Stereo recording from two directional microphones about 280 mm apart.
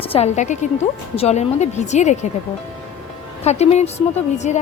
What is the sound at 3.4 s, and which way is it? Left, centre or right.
Speech, left.